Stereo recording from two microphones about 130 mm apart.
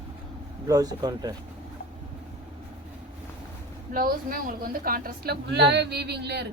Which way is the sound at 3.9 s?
90° right.